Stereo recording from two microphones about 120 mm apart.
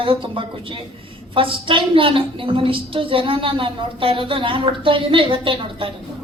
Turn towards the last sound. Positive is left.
turn(degrees=-45)  # may be behind; listen again after turning